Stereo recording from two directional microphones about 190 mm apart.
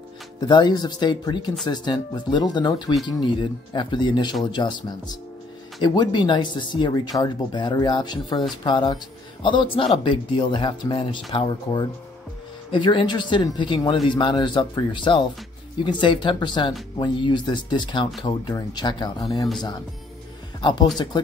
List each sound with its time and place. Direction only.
0.4 s speech: 25° left (ahead or behind)